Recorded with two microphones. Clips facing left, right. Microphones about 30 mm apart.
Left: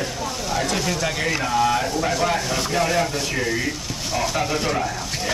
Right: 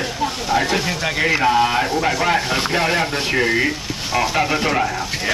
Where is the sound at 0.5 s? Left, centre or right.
Right.